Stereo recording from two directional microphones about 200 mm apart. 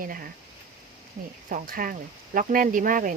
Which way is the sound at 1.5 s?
45° right (ahead or behind).